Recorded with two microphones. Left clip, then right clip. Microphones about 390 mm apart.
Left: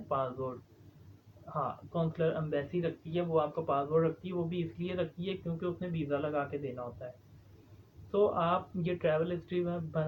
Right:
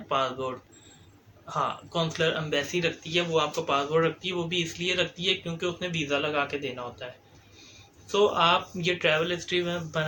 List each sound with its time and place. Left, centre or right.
0.1 s speech: left
1.5 s speech: left
8.1 s speech: left